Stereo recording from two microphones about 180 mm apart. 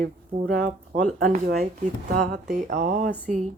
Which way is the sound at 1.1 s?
55° right (ahead or behind).